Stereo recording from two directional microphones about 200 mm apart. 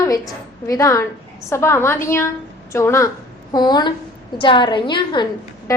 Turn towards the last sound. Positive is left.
turn(degrees=15)  # may be behind; listen again after turning